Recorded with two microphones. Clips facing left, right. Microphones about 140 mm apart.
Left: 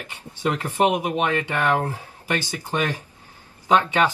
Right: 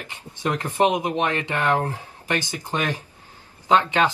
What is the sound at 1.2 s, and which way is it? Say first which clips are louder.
Speech: left 1 dB; 15° right (ahead or behind).